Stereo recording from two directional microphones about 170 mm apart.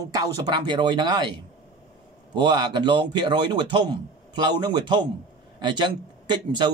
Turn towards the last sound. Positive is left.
turn(degrees=-25)  # may be behind; listen again after turning